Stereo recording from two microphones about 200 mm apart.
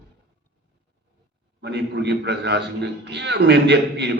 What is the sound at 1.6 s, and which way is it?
A man's voice, 60° right (ahead or behind).